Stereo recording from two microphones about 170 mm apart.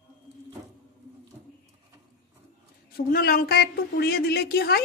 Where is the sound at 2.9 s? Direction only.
65° left (ahead or behind).